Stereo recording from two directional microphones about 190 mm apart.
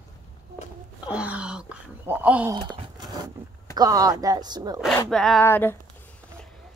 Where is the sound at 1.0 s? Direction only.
5° right (ahead or behind).